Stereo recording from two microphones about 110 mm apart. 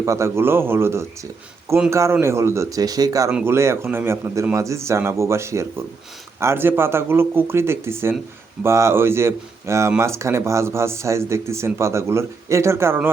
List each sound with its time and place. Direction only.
0.0 s speech: 25° right (ahead or behind)